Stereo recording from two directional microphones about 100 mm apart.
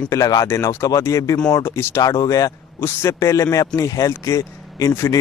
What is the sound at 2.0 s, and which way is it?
Speech, 40° left (ahead or behind).